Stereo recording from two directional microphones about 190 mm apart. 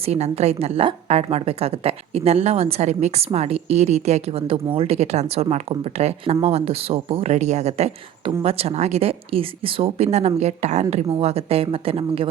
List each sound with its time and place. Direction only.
0.0 s a woman's voice: 35° right (ahead or behind)